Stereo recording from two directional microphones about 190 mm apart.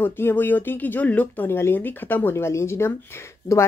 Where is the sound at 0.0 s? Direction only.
10° left (ahead or behind).